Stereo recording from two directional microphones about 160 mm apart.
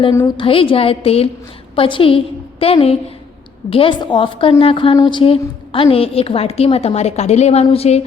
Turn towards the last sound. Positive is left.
turn(degrees=40)  # may be behind; listen again after turning